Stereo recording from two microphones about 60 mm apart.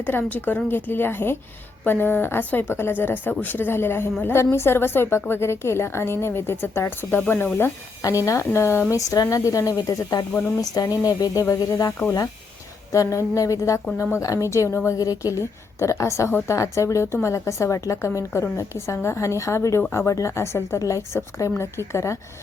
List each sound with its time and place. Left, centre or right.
0.0 s a woman's voice: left
8.0 s a woman's voice: left
8.5 s a woman's voice: left
8.9 s speech: left
10.6 s a woman's voice: left